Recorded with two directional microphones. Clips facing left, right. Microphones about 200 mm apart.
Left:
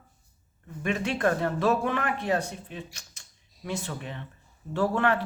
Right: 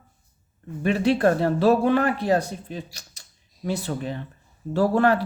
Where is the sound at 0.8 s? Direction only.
35° right (ahead or behind).